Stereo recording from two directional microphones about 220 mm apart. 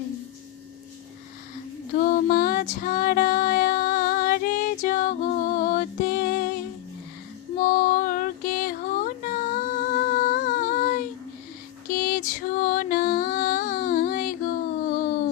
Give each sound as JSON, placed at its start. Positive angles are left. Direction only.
{"t": 2.0, "sound": "female singing", "side_deg": 40}
{"t": 7.6, "sound": "female singing", "side_deg": 40}
{"t": 11.9, "sound": "music", "side_deg": 40}
{"t": 14.8, "sound": "a sound", "side_deg": 40}